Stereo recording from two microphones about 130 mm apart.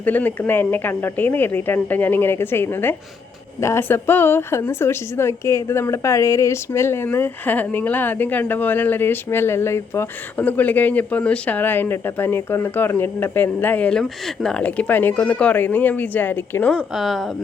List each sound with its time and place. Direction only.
0.0 s a woman's voice: 15° left (ahead or behind)
16.7 s speech: centre (ahead or behind)